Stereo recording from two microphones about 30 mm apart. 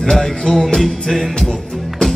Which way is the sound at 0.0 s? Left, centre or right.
Centre.